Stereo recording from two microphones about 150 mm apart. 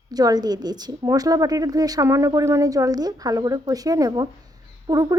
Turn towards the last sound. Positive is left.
turn(degrees=-25)  # may be behind; listen again after turning